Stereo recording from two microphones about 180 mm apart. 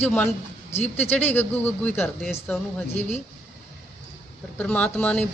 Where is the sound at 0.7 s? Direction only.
35° left (ahead or behind).